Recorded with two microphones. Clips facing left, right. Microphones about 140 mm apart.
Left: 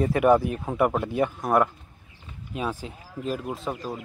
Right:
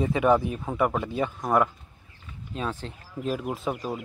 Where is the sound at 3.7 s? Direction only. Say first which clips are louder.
Right 1 dB; 15° right (ahead or behind).